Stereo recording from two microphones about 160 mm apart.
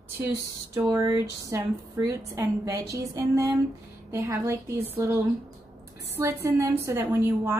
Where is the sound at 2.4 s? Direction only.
20° right (ahead or behind).